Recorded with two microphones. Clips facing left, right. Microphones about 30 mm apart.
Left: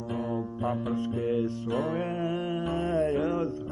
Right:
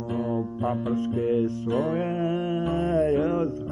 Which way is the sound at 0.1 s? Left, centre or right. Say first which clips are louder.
Right 4 dB; right.